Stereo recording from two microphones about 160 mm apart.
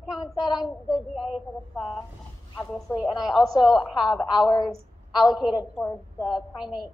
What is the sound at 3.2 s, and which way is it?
Speech, centre (ahead or behind).